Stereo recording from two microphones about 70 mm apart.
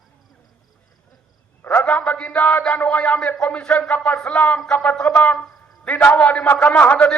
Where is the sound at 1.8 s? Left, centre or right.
Centre.